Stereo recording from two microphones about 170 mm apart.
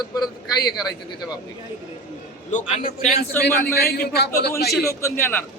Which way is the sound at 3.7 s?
70° left (ahead or behind).